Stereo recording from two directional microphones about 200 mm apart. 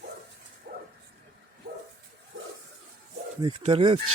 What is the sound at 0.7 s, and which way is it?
Bow-wow, 50° right (ahead or behind).